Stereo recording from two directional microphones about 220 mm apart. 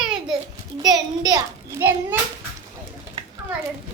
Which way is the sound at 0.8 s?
15° right (ahead or behind).